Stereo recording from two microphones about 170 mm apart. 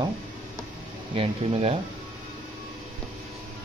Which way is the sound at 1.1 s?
35° right (ahead or behind).